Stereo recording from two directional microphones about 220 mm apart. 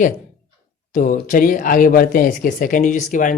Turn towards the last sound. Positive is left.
turn(degrees=35)  # may be behind; listen again after turning